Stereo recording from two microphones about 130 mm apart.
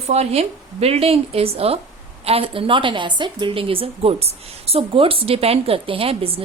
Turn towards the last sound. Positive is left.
turn(degrees=-45)  # may be behind; listen again after turning